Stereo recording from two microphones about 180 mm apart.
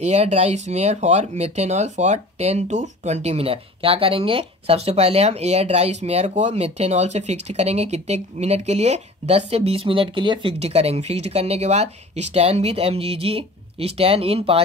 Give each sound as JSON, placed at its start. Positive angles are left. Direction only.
{"t": 0.0, "sound": "speech", "side_deg": -35}